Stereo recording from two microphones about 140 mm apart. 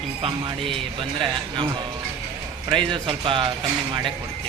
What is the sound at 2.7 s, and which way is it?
Speech, 35° right (ahead or behind).